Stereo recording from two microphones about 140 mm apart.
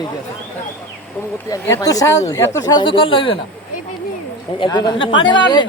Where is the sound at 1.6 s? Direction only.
20° left (ahead or behind); by 3.4 s 40° left (ahead or behind).